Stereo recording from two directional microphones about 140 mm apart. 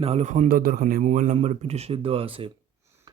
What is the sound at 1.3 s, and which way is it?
Speech, 50° right (ahead or behind).